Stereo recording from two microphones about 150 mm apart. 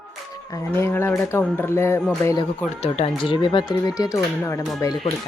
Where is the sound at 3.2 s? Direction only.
35° left (ahead or behind).